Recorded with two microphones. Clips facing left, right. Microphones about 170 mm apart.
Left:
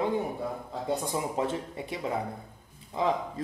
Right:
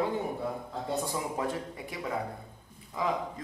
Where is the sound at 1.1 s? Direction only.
20° left (ahead or behind).